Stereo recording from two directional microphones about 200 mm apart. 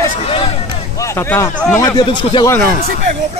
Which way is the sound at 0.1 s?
30° left (ahead or behind).